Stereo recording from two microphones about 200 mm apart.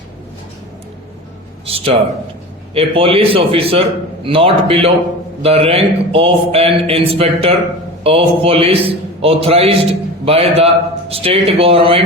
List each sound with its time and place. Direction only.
1.6 s speech: 30° right (ahead or behind)